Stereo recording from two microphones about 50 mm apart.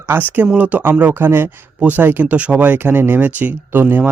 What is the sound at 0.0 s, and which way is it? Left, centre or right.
Speech, right.